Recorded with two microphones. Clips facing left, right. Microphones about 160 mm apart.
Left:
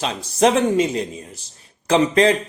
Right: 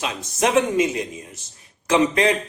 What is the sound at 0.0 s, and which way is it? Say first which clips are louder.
Speech: left 5 dB; 35° left (ahead or behind).